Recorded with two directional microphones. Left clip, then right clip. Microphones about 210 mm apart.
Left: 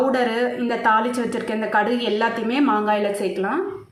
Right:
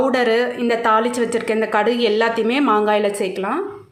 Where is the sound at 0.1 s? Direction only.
50° right (ahead or behind).